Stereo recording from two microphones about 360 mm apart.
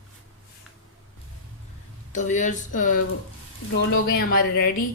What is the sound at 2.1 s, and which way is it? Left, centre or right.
Speech, centre.